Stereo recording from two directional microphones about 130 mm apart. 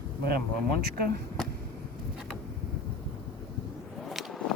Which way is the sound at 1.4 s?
5° left (ahead or behind).